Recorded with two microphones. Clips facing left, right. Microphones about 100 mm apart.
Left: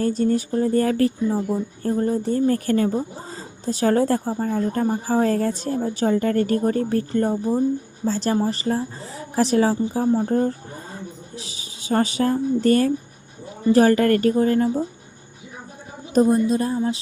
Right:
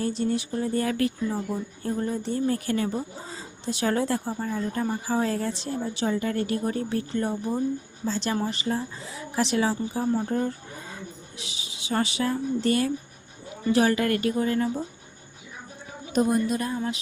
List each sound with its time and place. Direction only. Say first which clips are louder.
0.0 s speech: left 6 dB; 45° left (ahead or behind)
16.2 s speech: left 5 dB; 30° left (ahead or behind)